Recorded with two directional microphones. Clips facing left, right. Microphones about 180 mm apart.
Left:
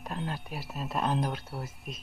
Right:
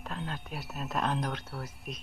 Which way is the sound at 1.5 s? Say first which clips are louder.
Left 2 dB; 15° left (ahead or behind).